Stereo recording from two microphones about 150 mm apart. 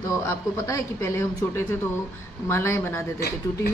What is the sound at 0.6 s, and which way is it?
Speech, 20° left (ahead or behind).